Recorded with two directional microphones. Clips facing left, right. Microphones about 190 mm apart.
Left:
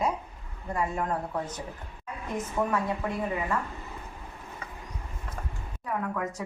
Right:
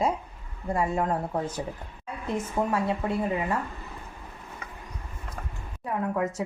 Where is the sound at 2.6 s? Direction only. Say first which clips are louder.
Right 1 dB; 25° right (ahead or behind).